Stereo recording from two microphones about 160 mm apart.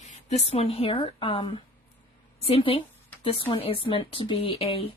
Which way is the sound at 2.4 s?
35° left (ahead or behind).